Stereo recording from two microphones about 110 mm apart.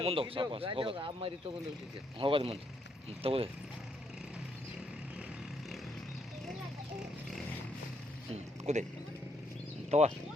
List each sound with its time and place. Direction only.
0.0 s speech: 60° right (ahead or behind)
8.3 s a sound: 90° right
9.9 s speech: 75° right (ahead or behind)